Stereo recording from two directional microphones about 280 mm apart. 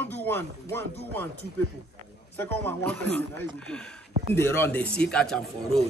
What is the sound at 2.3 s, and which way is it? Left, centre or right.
A man's voice, centre.